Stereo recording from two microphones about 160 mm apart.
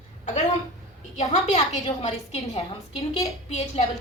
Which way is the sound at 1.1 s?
40° left (ahead or behind).